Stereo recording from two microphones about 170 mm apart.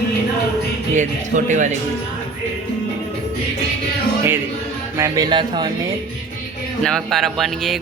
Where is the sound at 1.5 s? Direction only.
45° right (ahead or behind).